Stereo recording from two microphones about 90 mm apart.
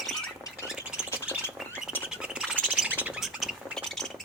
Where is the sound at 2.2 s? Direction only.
10° right (ahead or behind).